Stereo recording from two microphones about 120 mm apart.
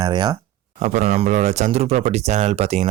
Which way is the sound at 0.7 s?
80° right.